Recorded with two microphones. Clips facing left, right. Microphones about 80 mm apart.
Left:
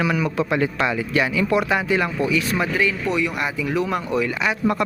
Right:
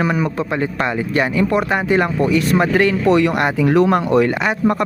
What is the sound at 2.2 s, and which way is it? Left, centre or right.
Speech, right.